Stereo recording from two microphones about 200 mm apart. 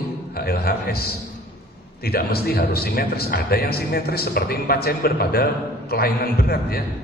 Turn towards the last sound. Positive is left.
turn(degrees=50)  # may be behind; listen again after turning